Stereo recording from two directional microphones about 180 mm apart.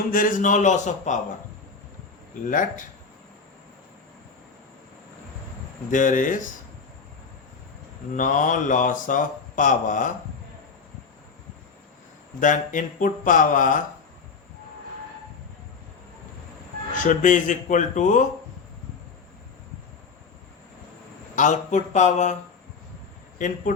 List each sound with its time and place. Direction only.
0.1 s speech: 50° left (ahead or behind)
2.5 s speech: 45° left (ahead or behind)
5.9 s speech: 45° left (ahead or behind)
8.1 s speech: 45° left (ahead or behind)
12.4 s speech: 45° left (ahead or behind)
17.0 s speech: 45° left (ahead or behind)
21.3 s speech: 45° left (ahead or behind)
23.7 s speech: 50° left (ahead or behind)